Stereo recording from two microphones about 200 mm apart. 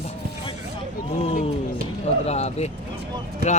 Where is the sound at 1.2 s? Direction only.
30° left (ahead or behind).